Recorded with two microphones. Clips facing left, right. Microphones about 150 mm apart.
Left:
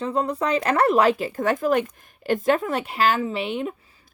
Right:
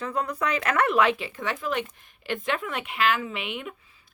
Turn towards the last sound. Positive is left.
turn(degrees=35)  # may be behind; listen again after turning